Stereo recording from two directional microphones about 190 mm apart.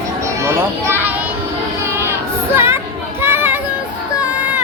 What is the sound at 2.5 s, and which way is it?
Chatter, 10° right (ahead or behind).